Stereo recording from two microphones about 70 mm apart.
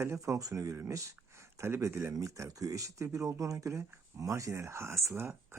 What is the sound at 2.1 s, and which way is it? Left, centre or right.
Speech, right.